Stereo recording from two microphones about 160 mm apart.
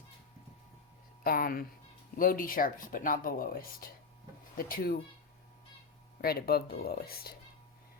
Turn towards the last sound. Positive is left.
turn(degrees=75)  # may be behind; listen again after turning